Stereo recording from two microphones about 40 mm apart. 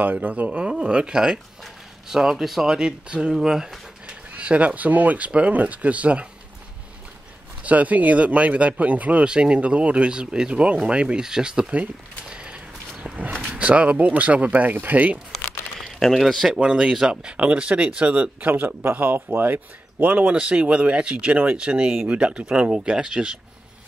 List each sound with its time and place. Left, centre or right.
0.0 s speech: right
0.5 s speech: right
4.1 s speech: right
7.6 s speech: right
9.2 s speech: right
12.3 s a sound: right
13.5 s speech: right
16.0 s speech: centre
16.5 s speech: right
16.9 s speech: centre; by 20.3 s right
20.3 s speech: right